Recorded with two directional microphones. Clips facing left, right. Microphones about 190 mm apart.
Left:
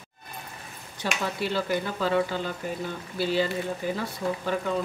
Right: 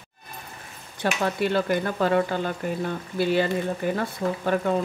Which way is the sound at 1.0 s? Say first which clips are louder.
Right 5 dB; 55° right (ahead or behind).